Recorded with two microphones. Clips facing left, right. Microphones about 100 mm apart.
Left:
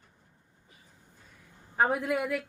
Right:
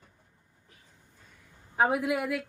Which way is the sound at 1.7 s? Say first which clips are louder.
Right 1 dB; 5° right (ahead or behind).